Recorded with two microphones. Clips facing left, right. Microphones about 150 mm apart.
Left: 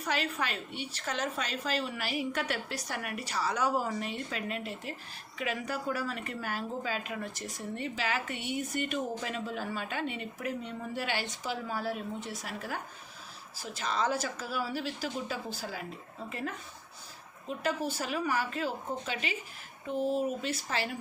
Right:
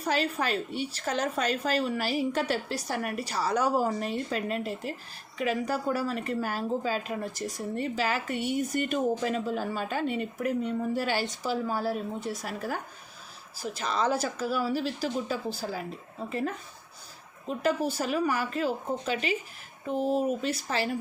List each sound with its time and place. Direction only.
0.0 s a woman's voice: 35° right (ahead or behind)
17.6 s a woman's voice: 40° right (ahead or behind)